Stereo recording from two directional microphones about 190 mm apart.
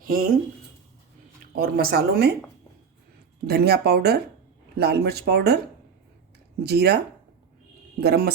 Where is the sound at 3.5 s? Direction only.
55° right (ahead or behind).